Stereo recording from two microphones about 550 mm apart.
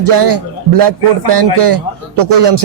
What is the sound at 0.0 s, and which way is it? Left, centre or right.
A man's voice, right.